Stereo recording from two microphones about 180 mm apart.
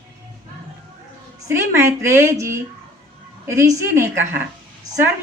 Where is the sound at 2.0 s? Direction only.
15° right (ahead or behind).